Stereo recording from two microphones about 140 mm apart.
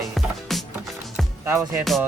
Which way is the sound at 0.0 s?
Centre (ahead or behind).